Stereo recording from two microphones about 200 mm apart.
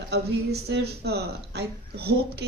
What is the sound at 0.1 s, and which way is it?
A woman's voice, 55° right (ahead or behind).